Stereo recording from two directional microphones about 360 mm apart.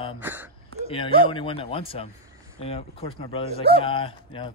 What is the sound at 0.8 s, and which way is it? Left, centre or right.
Speech, centre.